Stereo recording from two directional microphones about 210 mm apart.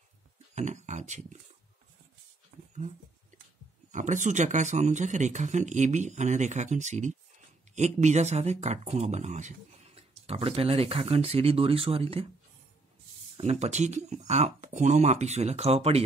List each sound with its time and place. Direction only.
0.6 s speech: 35° right (ahead or behind)
3.9 s speech: 35° right (ahead or behind)
13.4 s speech: 30° right (ahead or behind)